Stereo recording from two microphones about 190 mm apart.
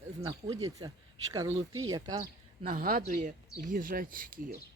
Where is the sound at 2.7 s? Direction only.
45° right (ahead or behind).